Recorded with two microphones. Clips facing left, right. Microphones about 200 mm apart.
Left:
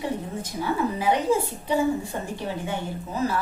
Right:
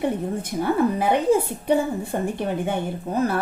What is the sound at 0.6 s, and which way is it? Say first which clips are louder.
A woman's voice: right 4 dB; 60° right (ahead or behind).